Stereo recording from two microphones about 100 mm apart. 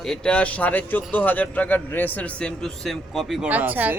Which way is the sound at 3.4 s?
15° right (ahead or behind).